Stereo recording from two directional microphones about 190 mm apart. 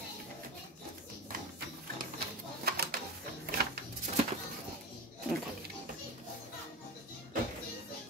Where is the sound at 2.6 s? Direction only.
55° right (ahead or behind).